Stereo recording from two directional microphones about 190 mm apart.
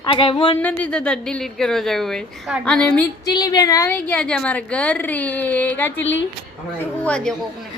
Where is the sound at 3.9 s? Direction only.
5° left (ahead or behind).